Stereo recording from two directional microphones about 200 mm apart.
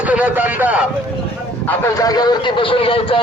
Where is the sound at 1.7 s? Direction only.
15° left (ahead or behind).